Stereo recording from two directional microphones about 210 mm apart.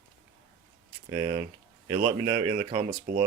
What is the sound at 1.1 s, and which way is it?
Speech, 20° right (ahead or behind).